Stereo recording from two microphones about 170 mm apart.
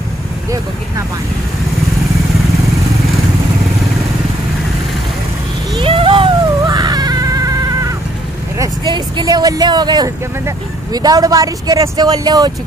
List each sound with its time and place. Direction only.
5.8 s vehicle: 30° right (ahead or behind)
8.5 s speech: 25° right (ahead or behind)